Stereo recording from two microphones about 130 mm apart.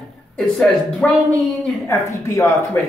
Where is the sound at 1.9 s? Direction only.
20° left (ahead or behind).